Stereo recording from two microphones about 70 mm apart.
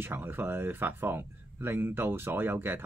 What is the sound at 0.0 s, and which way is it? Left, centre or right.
Speech, right.